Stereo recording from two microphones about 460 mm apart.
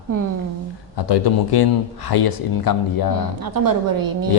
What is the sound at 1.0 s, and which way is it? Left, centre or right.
A man's voice, left.